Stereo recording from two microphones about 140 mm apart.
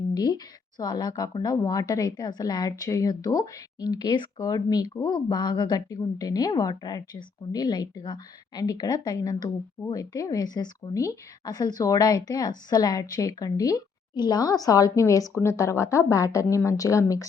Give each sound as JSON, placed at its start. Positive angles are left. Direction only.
{"t": 0.1, "sound": "speech", "side_deg": 30}